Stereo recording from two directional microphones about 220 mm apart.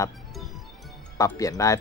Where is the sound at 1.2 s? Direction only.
15° left (ahead or behind).